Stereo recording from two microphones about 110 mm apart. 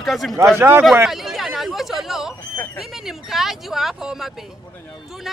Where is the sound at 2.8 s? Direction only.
5° right (ahead or behind).